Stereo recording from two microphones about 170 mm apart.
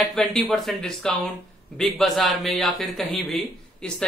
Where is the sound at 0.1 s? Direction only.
Centre (ahead or behind).